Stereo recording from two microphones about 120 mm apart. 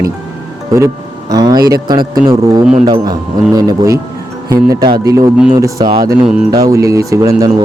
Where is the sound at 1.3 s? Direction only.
35° right (ahead or behind).